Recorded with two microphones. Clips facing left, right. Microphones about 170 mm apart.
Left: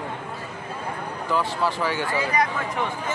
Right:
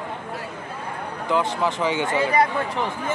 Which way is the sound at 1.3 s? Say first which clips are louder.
Right 2 dB; 20° right (ahead or behind).